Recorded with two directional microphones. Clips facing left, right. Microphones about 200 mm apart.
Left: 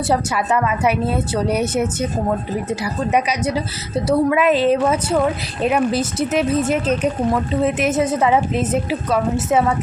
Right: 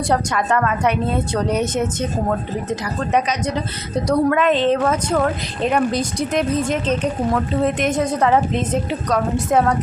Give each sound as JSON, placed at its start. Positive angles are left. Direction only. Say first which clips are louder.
{"t": 0.1, "sound": "a woman's voice", "louder": "even", "side_deg": 5}